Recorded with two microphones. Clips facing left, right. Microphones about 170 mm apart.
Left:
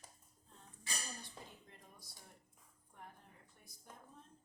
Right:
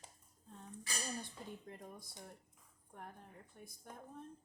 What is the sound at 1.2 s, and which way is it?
A woman's voice, 50° right (ahead or behind).